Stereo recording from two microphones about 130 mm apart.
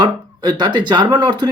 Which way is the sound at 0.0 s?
35° right (ahead or behind).